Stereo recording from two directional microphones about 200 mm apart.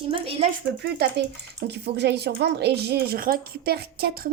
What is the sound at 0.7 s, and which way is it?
A woman's voice, 55° right (ahead or behind).